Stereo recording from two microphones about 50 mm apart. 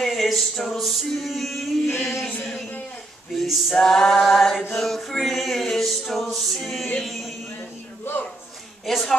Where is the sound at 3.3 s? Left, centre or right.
Centre.